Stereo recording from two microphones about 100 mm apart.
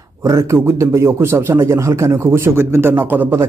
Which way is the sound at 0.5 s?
25° right (ahead or behind).